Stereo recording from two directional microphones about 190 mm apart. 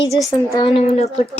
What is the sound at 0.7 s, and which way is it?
Female singing, 35° left (ahead or behind).